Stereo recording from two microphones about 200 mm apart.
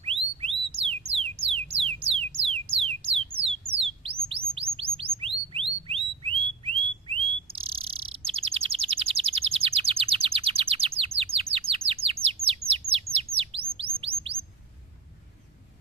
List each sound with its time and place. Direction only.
0.0 s music: 30° right (ahead or behind)
4.0 s chirp: 30° right (ahead or behind)
4.5 s bird: 30° right (ahead or behind)
11.3 s chirp: 30° right (ahead or behind)